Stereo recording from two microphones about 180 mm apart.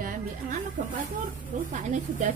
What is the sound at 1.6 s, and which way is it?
Speech, 45° right (ahead or behind).